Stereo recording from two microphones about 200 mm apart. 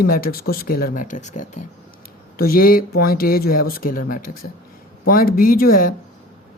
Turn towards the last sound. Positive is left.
turn(degrees=45)  # may be behind; listen again after turning